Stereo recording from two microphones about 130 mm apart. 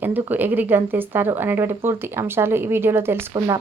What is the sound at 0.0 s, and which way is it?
Speech, 15° right (ahead or behind).